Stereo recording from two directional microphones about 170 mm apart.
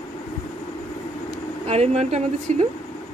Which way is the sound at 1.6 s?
40° right (ahead or behind).